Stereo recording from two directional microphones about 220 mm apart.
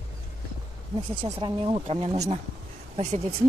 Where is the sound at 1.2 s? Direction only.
25° right (ahead or behind).